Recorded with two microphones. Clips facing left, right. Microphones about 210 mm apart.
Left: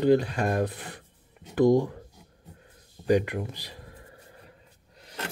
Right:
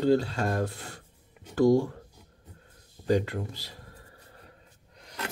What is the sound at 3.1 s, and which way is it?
Speech, 15° left (ahead or behind).